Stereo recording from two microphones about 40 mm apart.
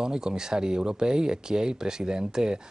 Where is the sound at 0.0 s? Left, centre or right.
Centre.